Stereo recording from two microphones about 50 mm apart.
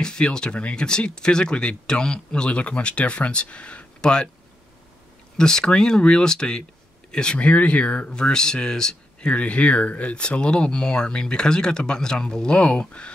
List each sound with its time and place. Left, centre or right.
0.0 s speech: centre
5.4 s speech: centre
7.3 s speech: left
9.3 s speech: left